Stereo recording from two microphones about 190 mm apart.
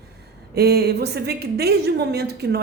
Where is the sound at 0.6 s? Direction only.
60° right (ahead or behind).